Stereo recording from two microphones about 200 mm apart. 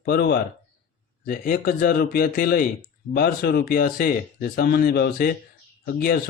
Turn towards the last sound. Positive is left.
turn(degrees=50)  # may be behind; listen again after turning